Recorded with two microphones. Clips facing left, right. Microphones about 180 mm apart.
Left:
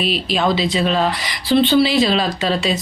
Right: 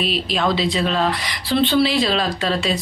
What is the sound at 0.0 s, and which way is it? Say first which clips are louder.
Speech: left 2 dB; centre (ahead or behind).